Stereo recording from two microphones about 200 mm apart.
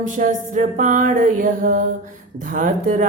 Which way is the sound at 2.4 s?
40° right (ahead or behind).